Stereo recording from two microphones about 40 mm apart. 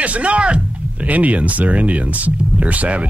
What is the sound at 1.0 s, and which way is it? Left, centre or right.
Speech, right.